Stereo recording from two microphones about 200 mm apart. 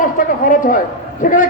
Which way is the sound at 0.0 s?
40° left (ahead or behind).